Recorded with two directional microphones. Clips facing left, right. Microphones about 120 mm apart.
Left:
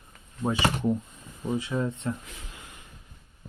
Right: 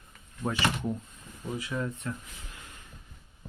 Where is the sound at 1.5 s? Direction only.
25° left (ahead or behind).